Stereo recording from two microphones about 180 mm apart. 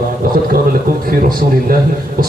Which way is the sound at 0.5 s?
55° right (ahead or behind).